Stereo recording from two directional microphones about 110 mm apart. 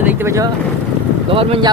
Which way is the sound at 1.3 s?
55° right (ahead or behind).